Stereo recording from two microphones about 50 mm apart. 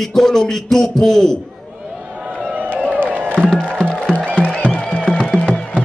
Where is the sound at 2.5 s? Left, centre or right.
Right.